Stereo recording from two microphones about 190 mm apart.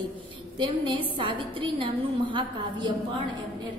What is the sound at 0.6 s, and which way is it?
A woman's voice, 25° right (ahead or behind).